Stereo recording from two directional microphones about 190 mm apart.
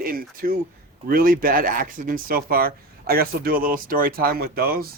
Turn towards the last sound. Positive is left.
turn(degrees=-50)  # may be behind; listen again after turning